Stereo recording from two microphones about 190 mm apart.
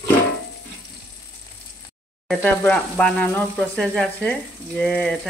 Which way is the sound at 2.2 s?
5° left (ahead or behind).